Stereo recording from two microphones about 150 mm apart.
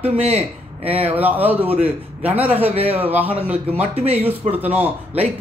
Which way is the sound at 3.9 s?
40° right (ahead or behind).